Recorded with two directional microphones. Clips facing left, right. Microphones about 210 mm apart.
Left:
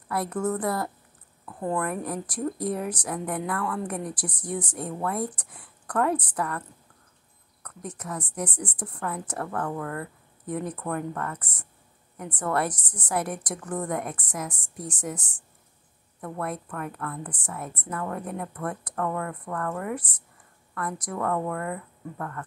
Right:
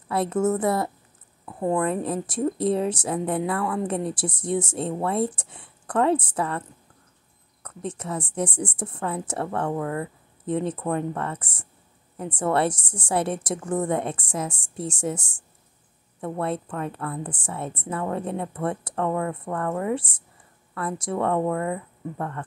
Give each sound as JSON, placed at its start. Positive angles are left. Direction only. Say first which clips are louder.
{"t": 0.1, "sound": "speech", "louder": "right 5 dB", "side_deg": -25}
{"t": 7.6, "sound": "speech", "louder": "right 5 dB", "side_deg": -25}